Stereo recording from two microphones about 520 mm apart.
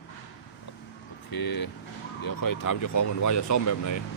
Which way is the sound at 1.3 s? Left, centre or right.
Left.